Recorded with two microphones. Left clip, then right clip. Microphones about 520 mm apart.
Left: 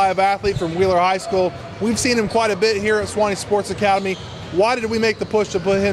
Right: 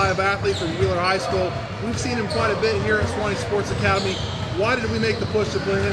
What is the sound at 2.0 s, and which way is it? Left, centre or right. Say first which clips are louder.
Speech: left 5 dB; left.